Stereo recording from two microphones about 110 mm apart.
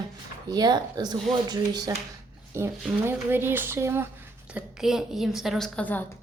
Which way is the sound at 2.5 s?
25° right (ahead or behind).